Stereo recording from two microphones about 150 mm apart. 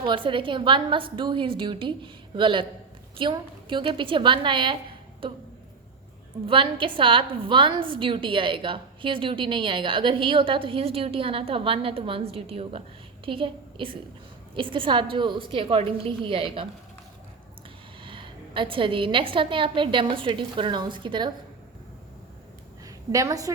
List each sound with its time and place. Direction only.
0.0 s a woman's voice: 35° right (ahead or behind)
6.4 s a woman's voice: 35° right (ahead or behind)
18.0 s a woman's voice: 35° right (ahead or behind)
23.1 s a woman's voice: 25° right (ahead or behind)